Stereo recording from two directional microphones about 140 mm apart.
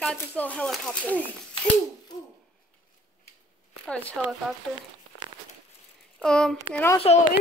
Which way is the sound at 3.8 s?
5° left (ahead or behind).